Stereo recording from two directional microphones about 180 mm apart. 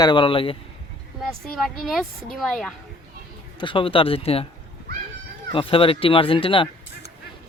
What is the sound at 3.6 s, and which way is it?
Speech, 30° left (ahead or behind).